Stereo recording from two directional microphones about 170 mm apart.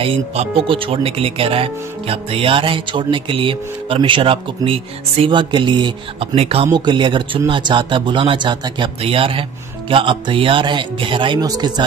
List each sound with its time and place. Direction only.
0.0 s speech: 35° right (ahead or behind)